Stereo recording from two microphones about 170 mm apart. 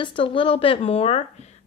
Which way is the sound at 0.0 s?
30° left (ahead or behind).